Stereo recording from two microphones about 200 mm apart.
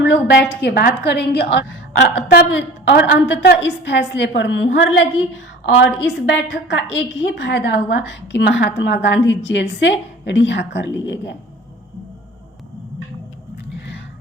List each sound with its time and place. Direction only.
0.0 s a woman's voice: 60° left (ahead or behind)
0.6 s a woman's voice: 45° left (ahead or behind); by 11.2 s 65° left (ahead or behind)